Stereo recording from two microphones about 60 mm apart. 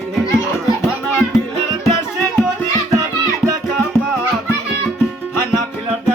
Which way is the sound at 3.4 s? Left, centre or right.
Centre.